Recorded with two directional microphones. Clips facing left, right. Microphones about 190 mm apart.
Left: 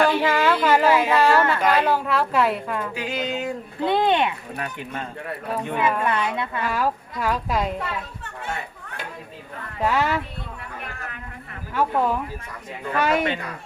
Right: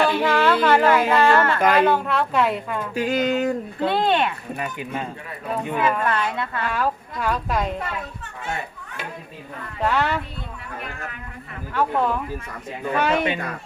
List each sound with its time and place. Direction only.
0.0 s speech: 10° left (ahead or behind)
2.9 s a sound: 45° right (ahead or behind)
3.8 s a woman's voice: 15° left (ahead or behind)
4.5 s speech: 5° right (ahead or behind)
5.5 s speech: 5° left (ahead or behind)
6.1 s a woman's voice: 15° left (ahead or behind)
9.8 s a woman's voice: 5° left (ahead or behind)
11.7 s a woman's voice: 10° left (ahead or behind)